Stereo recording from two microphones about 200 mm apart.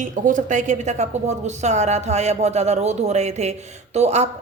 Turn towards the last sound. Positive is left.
turn(degrees=-35)  # may be behind; listen again after turning